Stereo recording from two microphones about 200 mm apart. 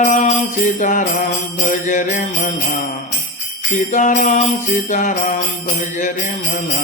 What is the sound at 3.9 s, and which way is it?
Jingle bell, 40° left (ahead or behind).